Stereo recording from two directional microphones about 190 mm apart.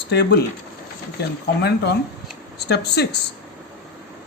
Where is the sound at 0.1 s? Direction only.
60° left (ahead or behind).